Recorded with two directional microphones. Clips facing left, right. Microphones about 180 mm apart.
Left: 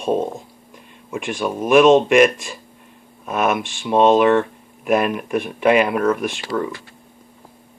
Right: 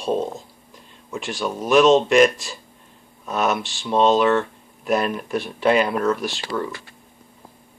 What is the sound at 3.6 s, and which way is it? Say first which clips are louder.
Speech: left 3 dB; 55° left (ahead or behind).